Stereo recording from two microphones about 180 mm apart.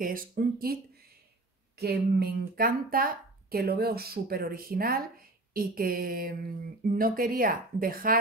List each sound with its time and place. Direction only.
0.0 s speech: 50° right (ahead or behind)
1.8 s speech: 60° right (ahead or behind)